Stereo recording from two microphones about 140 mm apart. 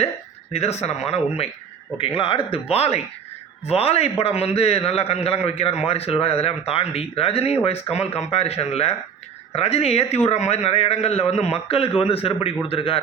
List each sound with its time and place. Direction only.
0.5 s a man's voice: 50° left (ahead or behind)